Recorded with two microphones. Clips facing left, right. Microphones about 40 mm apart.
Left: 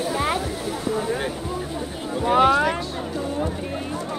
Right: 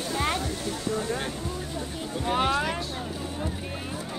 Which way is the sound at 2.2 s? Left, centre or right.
Centre.